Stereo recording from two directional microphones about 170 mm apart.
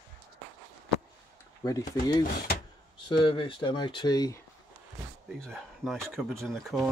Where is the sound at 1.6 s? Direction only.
20° left (ahead or behind).